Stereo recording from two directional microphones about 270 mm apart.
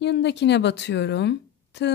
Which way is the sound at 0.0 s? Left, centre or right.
Left.